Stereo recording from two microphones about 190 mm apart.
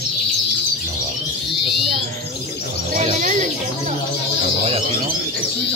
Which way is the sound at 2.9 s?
40° right (ahead or behind).